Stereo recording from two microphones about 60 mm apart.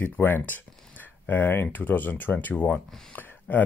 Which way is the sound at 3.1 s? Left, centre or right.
Left.